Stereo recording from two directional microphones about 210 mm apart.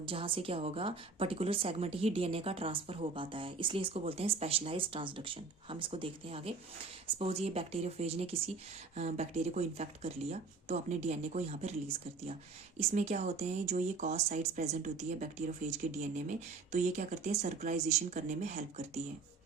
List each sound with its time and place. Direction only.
0.0 s a woman's voice: 25° right (ahead or behind)